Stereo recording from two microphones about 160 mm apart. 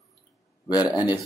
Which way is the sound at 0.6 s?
25° left (ahead or behind).